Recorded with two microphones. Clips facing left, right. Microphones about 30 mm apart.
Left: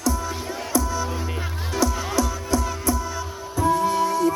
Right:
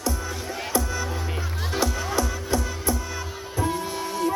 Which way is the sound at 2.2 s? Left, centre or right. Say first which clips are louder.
Left 3 dB; right.